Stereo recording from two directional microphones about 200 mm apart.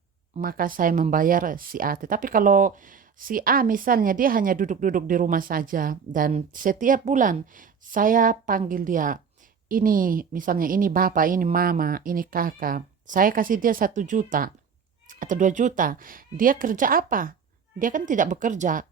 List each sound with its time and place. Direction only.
0.4 s a woman's voice: 45° right (ahead or behind)